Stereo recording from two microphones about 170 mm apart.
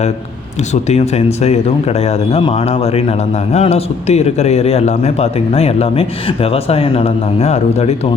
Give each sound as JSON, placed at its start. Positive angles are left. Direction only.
{"t": 0.7, "sound": "a man's voice", "side_deg": 40}